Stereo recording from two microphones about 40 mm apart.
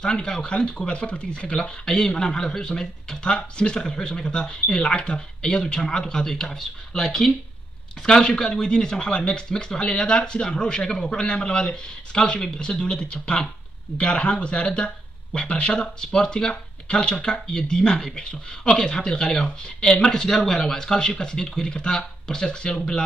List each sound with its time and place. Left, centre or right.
0.0 s speech: centre
1.6 s a man's voice: centre